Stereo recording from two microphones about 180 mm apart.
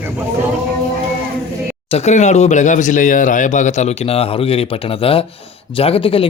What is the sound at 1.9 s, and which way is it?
A man's voice, 35° left (ahead or behind).